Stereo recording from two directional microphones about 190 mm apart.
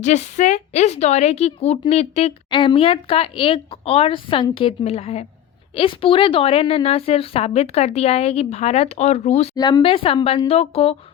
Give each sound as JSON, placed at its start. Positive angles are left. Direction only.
{"t": 0.0, "sound": "a woman's voice", "side_deg": 40}
{"t": 9.6, "sound": "speech", "side_deg": 20}